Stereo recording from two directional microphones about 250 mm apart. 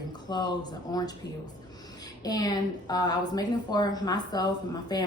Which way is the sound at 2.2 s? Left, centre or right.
Centre.